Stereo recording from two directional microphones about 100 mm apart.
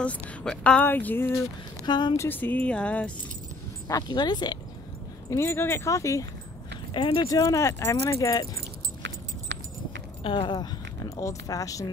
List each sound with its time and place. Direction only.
0.0 s speech: 10° left (ahead or behind)
1.9 s speech: 50° left (ahead or behind)
2.1 s speech: 20° left (ahead or behind)
3.8 s speech: 40° left (ahead or behind)
5.3 s speech: 25° left (ahead or behind)
6.9 s speech: 55° left (ahead or behind)
7.2 s speech: 35° left (ahead or behind)
10.2 s speech: 55° left (ahead or behind); by 11.9 s 35° left (ahead or behind)